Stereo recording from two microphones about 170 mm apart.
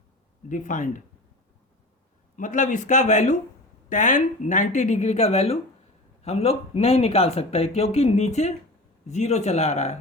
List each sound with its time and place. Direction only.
0.4 s speech: 50° left (ahead or behind)
2.3 s speech: 50° left (ahead or behind)